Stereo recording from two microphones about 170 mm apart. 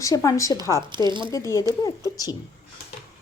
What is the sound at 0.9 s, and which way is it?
Speech, 25° right (ahead or behind).